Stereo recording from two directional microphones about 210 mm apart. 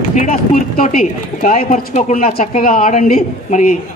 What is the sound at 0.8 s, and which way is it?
A woman's voice, 35° left (ahead or behind).